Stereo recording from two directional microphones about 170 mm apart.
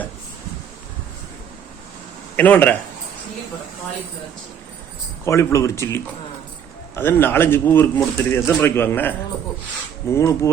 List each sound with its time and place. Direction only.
2.3 s speech: 10° left (ahead or behind)
5.2 s a man's voice: 15° left (ahead or behind)